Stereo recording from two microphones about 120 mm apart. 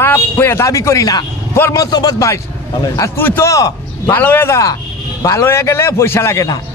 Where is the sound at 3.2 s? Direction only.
20° left (ahead or behind).